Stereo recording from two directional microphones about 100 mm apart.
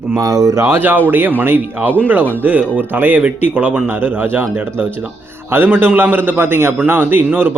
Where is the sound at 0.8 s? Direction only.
20° right (ahead or behind).